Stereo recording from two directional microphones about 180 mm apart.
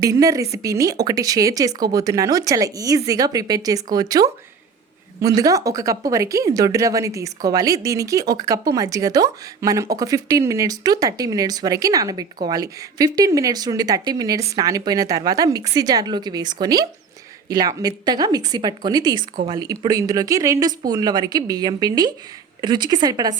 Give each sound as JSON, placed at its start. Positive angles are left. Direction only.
{"t": 0.0, "sound": "speech", "side_deg": -20}